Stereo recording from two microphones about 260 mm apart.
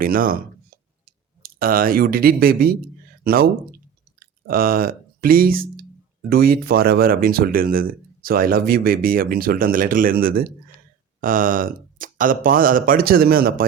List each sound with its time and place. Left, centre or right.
0.0 s clicking: right
3.2 s speech: right